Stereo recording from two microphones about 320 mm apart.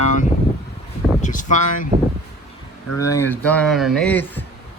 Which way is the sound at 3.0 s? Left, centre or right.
Centre.